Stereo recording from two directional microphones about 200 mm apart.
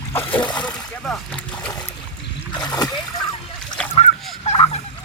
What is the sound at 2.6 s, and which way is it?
Splash, 20° left (ahead or behind).